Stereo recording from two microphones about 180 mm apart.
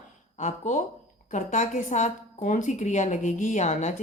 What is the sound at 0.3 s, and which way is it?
A woman's voice, 40° left (ahead or behind).